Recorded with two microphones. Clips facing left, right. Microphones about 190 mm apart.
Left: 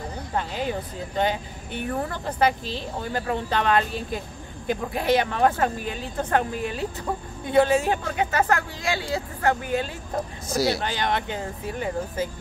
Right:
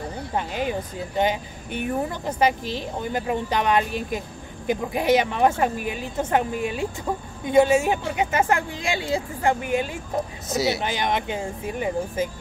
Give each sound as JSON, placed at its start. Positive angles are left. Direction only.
{"t": 0.4, "sound": "speech", "side_deg": -15}